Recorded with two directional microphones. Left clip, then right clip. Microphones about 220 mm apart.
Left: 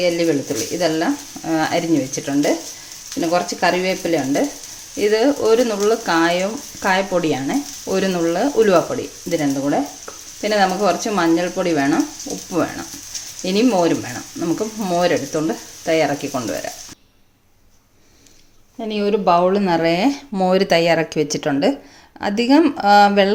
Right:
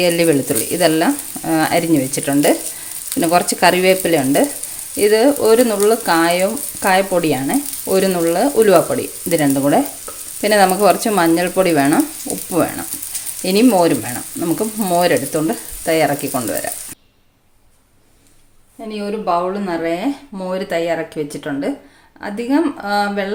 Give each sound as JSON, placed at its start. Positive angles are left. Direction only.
{"t": 0.0, "sound": "frying", "side_deg": -25}
{"t": 4.9, "sound": "speech", "side_deg": -15}
{"t": 10.4, "sound": "frying", "side_deg": -20}
{"t": 12.5, "sound": "speech", "side_deg": -15}
{"t": 18.9, "sound": "speech", "side_deg": 35}